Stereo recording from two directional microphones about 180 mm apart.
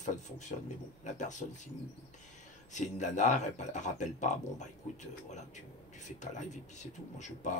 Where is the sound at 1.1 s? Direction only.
40° left (ahead or behind).